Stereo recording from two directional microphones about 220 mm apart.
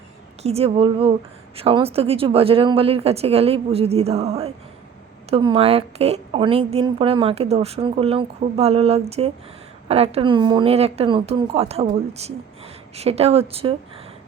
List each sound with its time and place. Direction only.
0.4 s a woman's voice: 25° right (ahead or behind)